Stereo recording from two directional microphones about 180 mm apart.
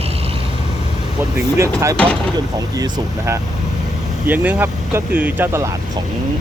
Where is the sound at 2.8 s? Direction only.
20° right (ahead or behind).